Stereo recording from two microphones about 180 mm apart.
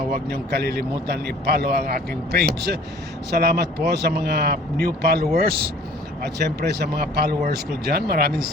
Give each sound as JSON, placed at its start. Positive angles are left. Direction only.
{"t": 0.3, "sound": "a man's voice", "side_deg": -60}